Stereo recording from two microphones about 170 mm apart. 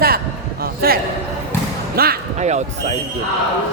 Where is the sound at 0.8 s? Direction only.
60° right (ahead or behind).